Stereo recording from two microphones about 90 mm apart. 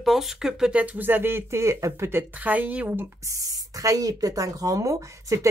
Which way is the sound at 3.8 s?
40° right (ahead or behind).